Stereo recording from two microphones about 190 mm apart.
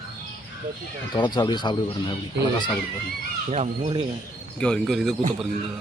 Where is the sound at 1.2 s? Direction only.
25° left (ahead or behind).